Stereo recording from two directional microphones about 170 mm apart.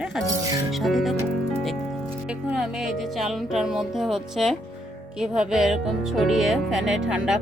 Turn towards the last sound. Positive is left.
turn(degrees=-5)  # may be behind; listen again after turning